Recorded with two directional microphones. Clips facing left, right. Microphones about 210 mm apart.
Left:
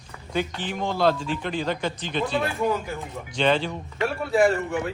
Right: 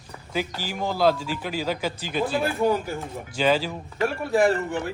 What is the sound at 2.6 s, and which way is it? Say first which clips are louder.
Speech: right 2 dB; 35° right (ahead or behind).